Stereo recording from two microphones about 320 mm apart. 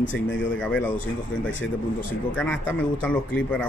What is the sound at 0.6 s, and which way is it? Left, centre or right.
Speech, centre.